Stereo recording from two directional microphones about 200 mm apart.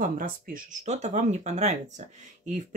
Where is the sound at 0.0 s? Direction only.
45° right (ahead or behind).